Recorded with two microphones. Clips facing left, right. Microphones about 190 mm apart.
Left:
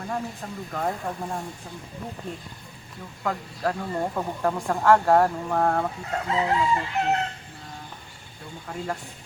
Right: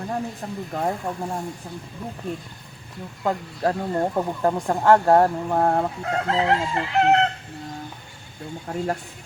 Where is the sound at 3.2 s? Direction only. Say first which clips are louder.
Right 4 dB; 30° right (ahead or behind).